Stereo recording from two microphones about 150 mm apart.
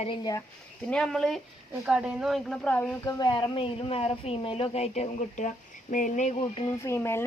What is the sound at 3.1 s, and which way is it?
Speech, 30° left (ahead or behind).